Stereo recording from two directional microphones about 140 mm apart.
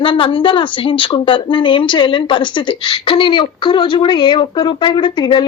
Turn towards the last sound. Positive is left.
turn(degrees=35)  # may be behind; listen again after turning